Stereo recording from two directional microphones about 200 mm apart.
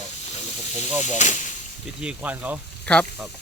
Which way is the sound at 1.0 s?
35° left (ahead or behind).